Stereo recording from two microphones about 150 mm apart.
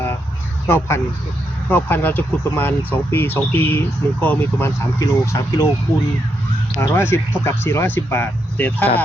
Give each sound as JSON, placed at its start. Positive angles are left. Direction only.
{"t": 0.7, "sound": "speech", "side_deg": 15}
{"t": 6.7, "sound": "speech", "side_deg": 15}